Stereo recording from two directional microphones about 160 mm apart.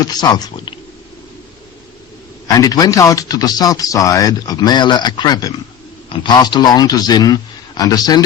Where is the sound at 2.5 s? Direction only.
20° left (ahead or behind).